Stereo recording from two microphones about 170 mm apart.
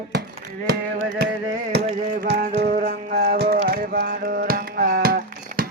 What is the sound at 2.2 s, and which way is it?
Music, 70° right (ahead or behind).